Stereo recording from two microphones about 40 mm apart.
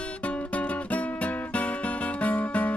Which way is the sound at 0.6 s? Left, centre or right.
Left.